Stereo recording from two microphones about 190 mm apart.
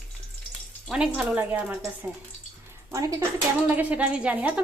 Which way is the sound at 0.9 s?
5° right (ahead or behind).